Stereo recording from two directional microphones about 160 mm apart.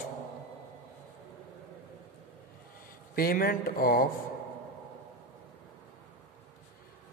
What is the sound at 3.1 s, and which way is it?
Speech, 65° left (ahead or behind).